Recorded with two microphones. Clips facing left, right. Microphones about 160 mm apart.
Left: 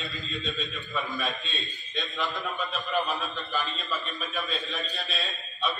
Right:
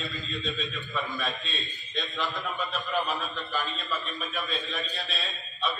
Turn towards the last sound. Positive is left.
turn(degrees=0)  # may be behind; listen again after turning